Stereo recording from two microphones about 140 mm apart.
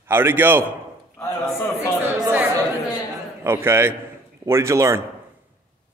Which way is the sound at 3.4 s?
15° right (ahead or behind).